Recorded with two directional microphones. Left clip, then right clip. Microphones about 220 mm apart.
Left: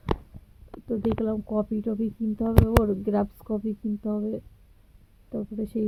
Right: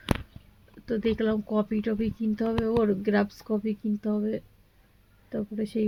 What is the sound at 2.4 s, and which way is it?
Speech, 5° right (ahead or behind).